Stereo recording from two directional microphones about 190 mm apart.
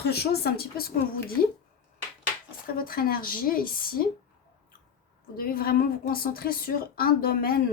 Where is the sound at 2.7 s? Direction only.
50° left (ahead or behind).